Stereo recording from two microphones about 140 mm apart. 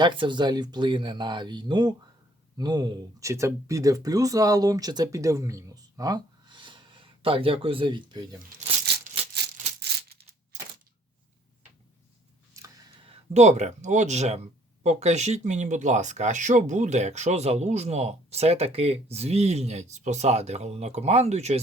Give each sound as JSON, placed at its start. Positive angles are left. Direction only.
{"t": 0.0, "sound": "speech", "side_deg": -35}
{"t": 13.1, "sound": "speech", "side_deg": -55}